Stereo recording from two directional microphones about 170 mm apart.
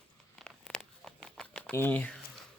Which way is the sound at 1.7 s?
10° left (ahead or behind).